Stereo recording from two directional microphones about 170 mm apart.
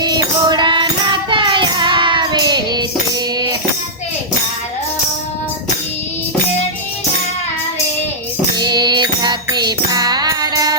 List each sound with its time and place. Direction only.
0.0 s music: 25° right (ahead or behind)
8.5 s music: 25° right (ahead or behind)